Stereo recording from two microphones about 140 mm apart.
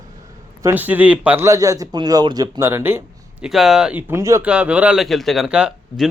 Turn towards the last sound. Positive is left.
turn(degrees=-5)  # may be behind; listen again after turning